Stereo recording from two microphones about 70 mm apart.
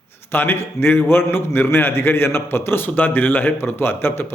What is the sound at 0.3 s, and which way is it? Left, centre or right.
A man's voice, left.